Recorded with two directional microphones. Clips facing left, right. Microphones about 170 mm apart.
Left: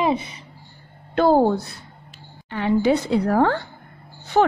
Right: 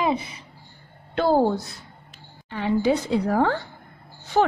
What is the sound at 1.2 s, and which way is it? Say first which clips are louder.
Speech: left 3 dB; 50° left (ahead or behind).